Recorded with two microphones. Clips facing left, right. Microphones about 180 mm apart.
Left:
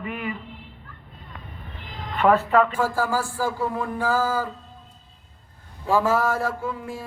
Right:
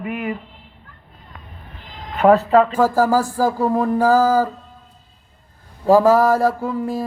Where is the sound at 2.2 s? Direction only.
40° right (ahead or behind).